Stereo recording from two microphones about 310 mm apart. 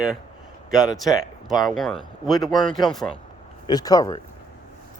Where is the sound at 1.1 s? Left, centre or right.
Centre.